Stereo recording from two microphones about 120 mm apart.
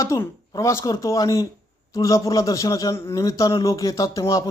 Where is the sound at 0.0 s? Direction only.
25° left (ahead or behind).